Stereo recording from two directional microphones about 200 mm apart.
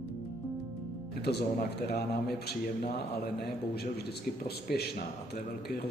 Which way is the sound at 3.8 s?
55° left (ahead or behind).